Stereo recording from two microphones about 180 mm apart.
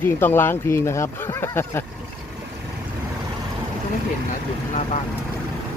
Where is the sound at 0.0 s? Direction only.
10° left (ahead or behind).